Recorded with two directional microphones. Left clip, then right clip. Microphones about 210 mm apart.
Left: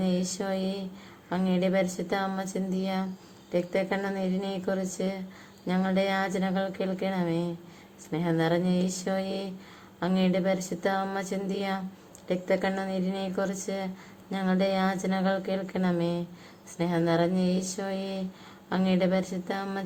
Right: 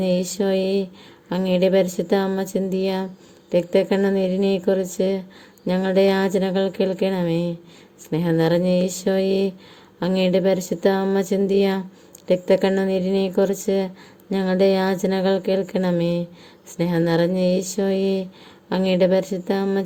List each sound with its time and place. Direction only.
0.0 s a woman's voice: 35° right (ahead or behind)